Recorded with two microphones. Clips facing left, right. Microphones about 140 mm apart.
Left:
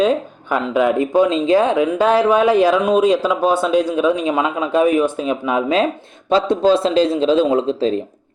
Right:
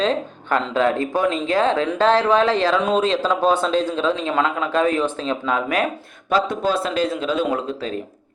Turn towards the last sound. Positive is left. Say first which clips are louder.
# left 8 dB
turn(degrees=25)  # may be behind; listen again after turning